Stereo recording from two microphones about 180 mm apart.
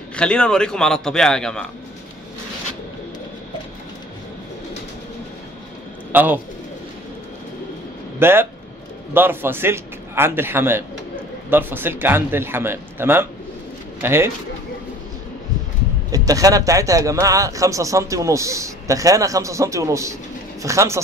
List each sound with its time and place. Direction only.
0.1 s a man's voice: 5° left (ahead or behind)
6.1 s a man's voice: 10° right (ahead or behind)
8.2 s a man's voice: 10° right (ahead or behind)
16.1 s a man's voice: 20° right (ahead or behind)